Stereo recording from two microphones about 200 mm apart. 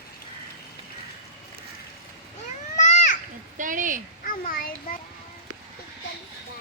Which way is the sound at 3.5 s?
40° right (ahead or behind).